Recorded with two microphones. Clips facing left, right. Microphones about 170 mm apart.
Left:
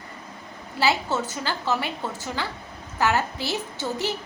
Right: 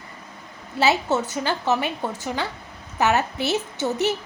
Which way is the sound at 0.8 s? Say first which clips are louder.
Right 3 dB; 20° right (ahead or behind).